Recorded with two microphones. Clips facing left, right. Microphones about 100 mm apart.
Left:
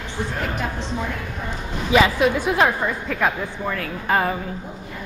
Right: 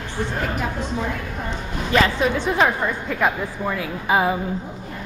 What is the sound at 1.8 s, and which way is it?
A woman's voice, 10° left (ahead or behind).